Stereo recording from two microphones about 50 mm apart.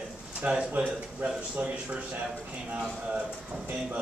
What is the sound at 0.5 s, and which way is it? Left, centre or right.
Speech, centre.